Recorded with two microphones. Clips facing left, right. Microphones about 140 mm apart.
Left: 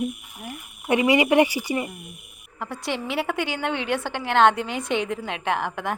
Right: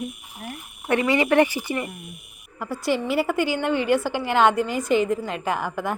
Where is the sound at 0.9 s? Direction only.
15° left (ahead or behind).